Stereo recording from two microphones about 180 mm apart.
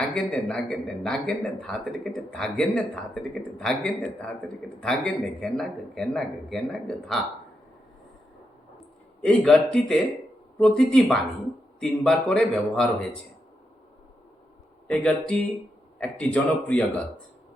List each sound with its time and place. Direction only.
0.1 s speech: 5° left (ahead or behind)
9.2 s speech: 5° left (ahead or behind)
14.8 s speech: 5° left (ahead or behind)